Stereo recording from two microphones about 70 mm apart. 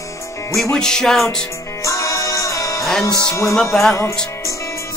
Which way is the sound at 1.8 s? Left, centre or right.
Left.